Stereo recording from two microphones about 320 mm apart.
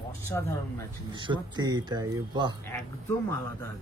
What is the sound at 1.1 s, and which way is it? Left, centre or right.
Speech, centre.